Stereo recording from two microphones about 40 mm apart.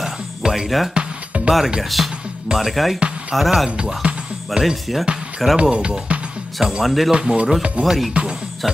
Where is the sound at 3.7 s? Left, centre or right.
Right.